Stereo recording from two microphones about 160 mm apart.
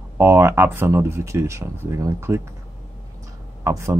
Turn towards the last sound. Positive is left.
turn(degrees=-20)  # may be behind; listen again after turning